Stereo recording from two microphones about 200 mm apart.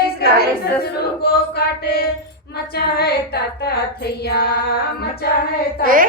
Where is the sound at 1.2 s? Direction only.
50° left (ahead or behind).